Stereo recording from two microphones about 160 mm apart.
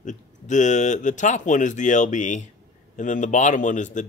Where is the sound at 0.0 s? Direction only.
50° left (ahead or behind).